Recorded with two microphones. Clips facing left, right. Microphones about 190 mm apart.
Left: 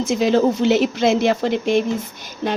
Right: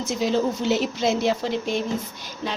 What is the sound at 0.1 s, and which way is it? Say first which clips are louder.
Speech: left 6 dB; 75° left (ahead or behind).